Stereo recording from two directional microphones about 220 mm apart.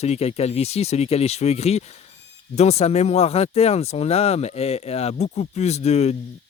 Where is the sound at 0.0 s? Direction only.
30° left (ahead or behind).